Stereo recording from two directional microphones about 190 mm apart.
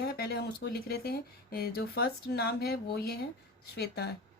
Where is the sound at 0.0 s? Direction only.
55° left (ahead or behind).